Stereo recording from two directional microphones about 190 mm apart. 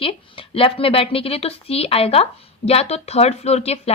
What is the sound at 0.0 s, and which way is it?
Speech, 30° left (ahead or behind).